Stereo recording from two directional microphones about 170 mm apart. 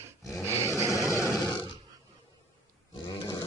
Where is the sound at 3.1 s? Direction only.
25° left (ahead or behind).